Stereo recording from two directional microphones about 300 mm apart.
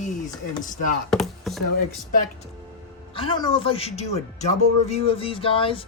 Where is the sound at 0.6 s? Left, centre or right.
Left.